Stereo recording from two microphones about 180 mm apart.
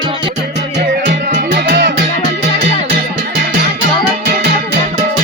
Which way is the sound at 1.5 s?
60° right (ahead or behind).